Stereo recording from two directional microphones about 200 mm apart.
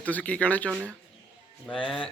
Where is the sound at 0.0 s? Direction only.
5° left (ahead or behind).